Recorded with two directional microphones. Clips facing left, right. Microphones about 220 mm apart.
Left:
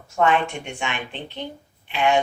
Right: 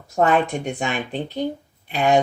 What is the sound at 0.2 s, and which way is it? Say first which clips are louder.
Speech: right 2 dB; 40° right (ahead or behind).